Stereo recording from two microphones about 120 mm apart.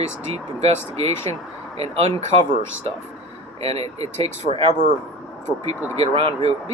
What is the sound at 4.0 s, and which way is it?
Speech, 60° right (ahead or behind).